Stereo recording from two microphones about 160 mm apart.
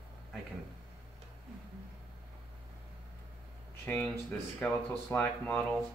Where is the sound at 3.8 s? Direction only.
10° left (ahead or behind).